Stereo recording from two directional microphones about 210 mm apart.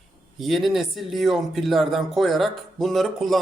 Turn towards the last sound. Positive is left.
turn(degrees=0)  # may be behind; listen again after turning